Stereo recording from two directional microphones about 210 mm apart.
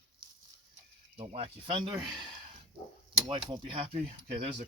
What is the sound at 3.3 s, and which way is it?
Speech, 25° right (ahead or behind).